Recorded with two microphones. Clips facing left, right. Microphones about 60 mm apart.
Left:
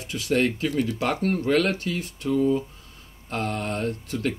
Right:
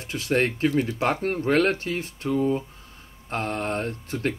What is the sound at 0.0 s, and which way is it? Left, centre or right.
Speech, right.